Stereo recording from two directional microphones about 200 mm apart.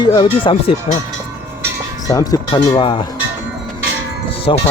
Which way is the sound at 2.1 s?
20° left (ahead or behind).